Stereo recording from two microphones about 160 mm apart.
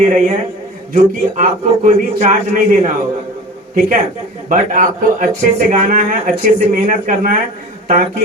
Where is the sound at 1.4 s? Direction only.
50° right (ahead or behind).